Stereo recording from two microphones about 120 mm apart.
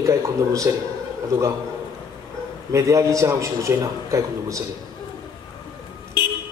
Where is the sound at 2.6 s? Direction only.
25° right (ahead or behind).